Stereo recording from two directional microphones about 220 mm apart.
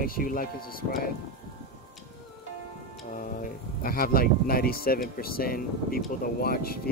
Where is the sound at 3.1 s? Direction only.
40° left (ahead or behind).